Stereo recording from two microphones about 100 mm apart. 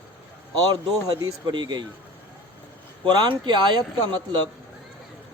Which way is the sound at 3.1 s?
45° right (ahead or behind).